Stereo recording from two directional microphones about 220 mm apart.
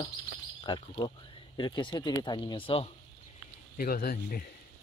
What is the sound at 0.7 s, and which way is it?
Speech, 20° left (ahead or behind).